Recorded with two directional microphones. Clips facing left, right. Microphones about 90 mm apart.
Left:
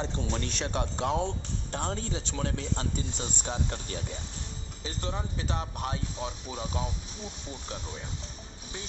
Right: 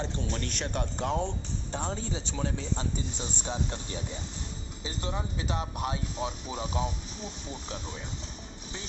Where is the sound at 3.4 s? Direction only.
5° left (ahead or behind).